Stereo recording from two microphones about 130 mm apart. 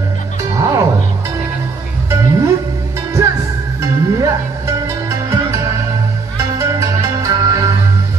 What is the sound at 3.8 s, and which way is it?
Music, 25° right (ahead or behind).